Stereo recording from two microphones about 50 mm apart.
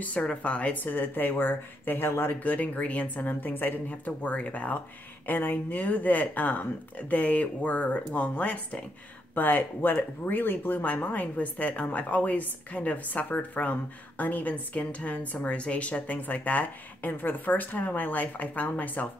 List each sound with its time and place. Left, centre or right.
0.0 s speech: left
0.8 s a woman's voice: left
2.4 s a woman's voice: left
4.2 s a woman's voice: left
9.3 s a woman's voice: left